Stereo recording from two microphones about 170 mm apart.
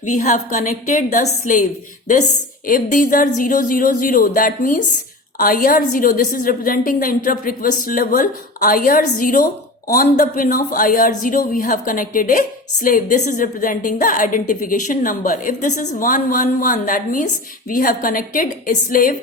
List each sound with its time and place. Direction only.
0.0 s speech: 45° left (ahead or behind)
2.6 s a woman's voice: 50° left (ahead or behind)